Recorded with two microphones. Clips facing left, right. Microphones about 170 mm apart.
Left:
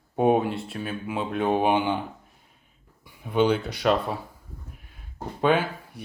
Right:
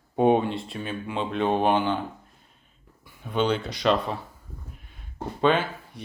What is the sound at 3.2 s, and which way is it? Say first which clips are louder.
Speech: left 3 dB; 10° left (ahead or behind).